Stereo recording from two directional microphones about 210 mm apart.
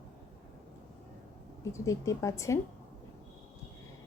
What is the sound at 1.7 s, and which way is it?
Speech, 15° left (ahead or behind).